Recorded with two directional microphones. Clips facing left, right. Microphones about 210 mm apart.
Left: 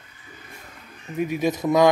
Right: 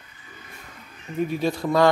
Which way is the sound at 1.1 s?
15° left (ahead or behind).